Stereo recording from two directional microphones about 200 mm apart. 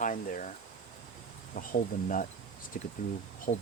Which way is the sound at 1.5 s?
45° left (ahead or behind).